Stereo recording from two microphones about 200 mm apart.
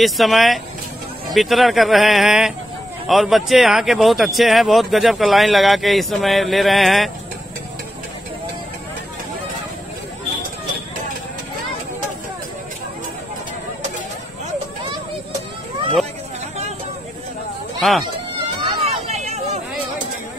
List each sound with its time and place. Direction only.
0.0 s speech: centre (ahead or behind)
17.7 s speech: centre (ahead or behind)
18.6 s a sound: 35° right (ahead or behind)